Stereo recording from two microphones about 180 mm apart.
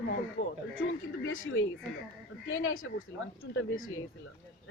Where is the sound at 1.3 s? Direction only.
90° left.